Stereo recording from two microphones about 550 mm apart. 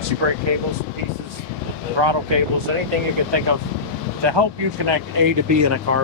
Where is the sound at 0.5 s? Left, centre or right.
Right.